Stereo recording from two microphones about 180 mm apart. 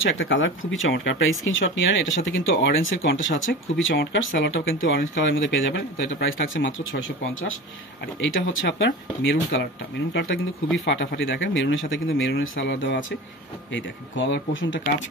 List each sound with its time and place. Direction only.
0.0 s speech: 90° left
3.8 s speech: 75° left (ahead or behind)
6.5 s speech: 90° left
13.7 s speech: 90° left